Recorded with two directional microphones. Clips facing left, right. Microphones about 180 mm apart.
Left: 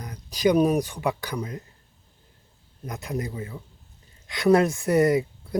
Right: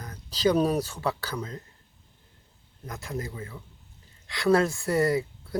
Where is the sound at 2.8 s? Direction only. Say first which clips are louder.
Left 4 dB; 20° left (ahead or behind).